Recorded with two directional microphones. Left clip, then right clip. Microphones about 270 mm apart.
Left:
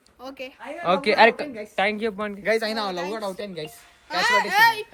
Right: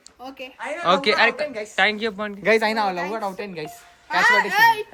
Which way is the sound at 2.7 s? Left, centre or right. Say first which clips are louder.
Right 4 dB; centre.